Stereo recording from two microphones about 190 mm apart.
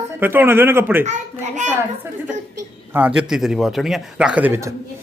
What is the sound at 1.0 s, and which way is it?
Speech, 40° right (ahead or behind).